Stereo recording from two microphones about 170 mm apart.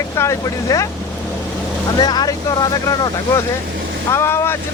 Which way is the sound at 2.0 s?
25° left (ahead or behind).